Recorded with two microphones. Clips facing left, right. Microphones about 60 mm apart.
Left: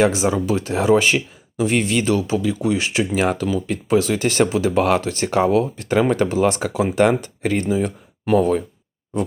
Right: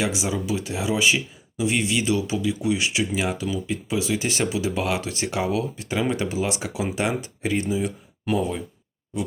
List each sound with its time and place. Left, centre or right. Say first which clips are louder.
0.0 s speech: left 8 dB; left